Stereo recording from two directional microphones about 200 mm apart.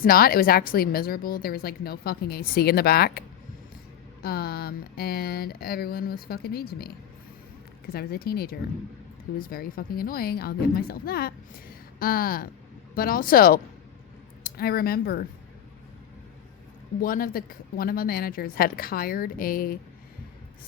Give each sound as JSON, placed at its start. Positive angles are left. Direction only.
{"t": 0.0, "sound": "a woman's voice", "side_deg": 50}
{"t": 7.9, "sound": "a woman's voice", "side_deg": 50}
{"t": 17.0, "sound": "a woman's voice", "side_deg": 45}